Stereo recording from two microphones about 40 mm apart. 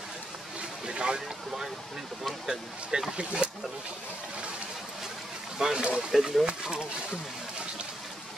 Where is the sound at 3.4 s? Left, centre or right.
Right.